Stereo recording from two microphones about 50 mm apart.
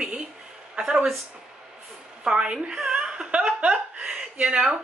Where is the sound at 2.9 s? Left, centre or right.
Centre.